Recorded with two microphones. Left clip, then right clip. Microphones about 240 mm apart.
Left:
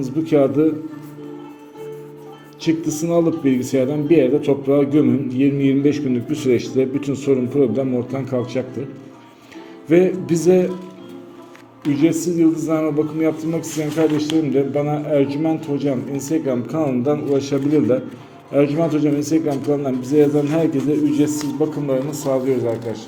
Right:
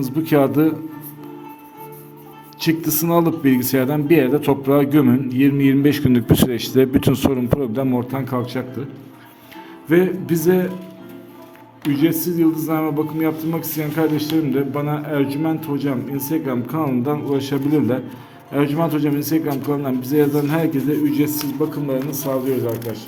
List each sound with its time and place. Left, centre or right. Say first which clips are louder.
0.0 s speech: even; right
2.6 s speech: even; right
9.9 s a man's voice: left 2 dB; centre
11.9 s a man's voice: left 1 dB; centre